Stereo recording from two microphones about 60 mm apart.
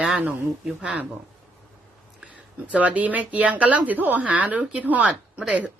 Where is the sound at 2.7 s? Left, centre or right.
Right.